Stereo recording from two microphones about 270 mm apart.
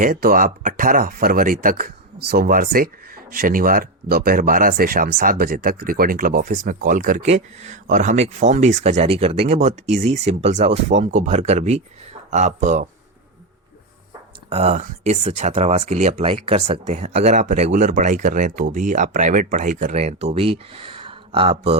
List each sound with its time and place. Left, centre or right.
0.0 s speech: right
14.5 s speech: right